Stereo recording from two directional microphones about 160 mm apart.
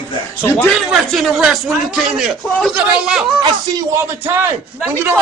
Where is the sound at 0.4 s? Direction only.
15° left (ahead or behind).